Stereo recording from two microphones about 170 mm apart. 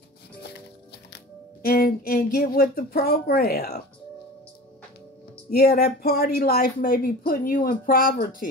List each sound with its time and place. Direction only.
1.6 s speech: 60° left (ahead or behind)
5.5 s speech: 70° left (ahead or behind)